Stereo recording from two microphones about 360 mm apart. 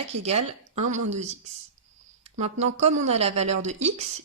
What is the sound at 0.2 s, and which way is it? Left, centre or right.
Speech, centre.